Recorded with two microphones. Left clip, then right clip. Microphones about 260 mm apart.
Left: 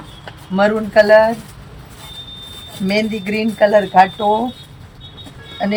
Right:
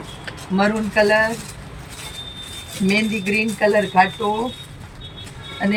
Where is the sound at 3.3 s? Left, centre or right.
Centre.